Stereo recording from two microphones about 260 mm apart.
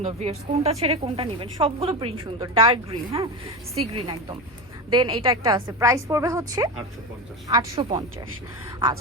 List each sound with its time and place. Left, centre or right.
0.0 s a woman's voice: right
7.8 s speech: centre